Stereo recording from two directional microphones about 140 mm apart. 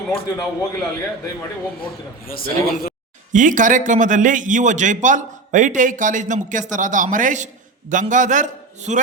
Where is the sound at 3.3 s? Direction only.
65° right (ahead or behind).